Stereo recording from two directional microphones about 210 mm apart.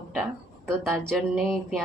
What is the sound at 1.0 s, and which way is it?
Speech, centre (ahead or behind).